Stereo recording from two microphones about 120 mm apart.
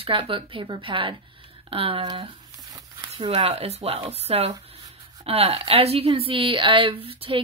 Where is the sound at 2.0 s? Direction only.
40° right (ahead or behind).